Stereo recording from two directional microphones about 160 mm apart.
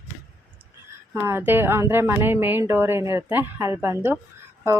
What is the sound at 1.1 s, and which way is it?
A woman's voice, 15° right (ahead or behind).